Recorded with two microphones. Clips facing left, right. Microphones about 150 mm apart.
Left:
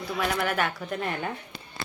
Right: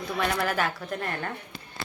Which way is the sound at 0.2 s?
5° left (ahead or behind).